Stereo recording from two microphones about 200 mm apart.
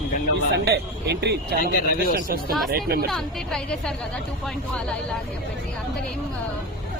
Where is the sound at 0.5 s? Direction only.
55° right (ahead or behind).